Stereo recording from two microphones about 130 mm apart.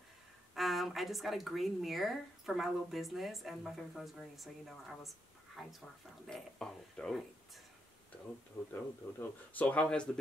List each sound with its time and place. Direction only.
0.6 s speech: centre (ahead or behind)
8.7 s speech: 15° left (ahead or behind)